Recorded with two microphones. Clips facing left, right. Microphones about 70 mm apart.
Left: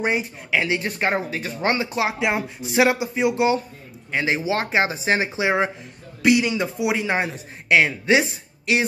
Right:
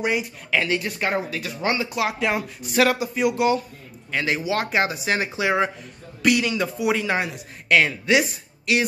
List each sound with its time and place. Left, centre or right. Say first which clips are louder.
0.0 s speech: left 1 dB; left
0.5 s speech: left 1 dB; centre
0.7 s speech: left 1 dB; left
7.6 s speech: left 1 dB; centre